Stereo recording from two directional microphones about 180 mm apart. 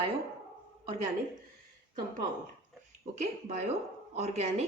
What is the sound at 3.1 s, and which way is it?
A woman's voice, 40° right (ahead or behind).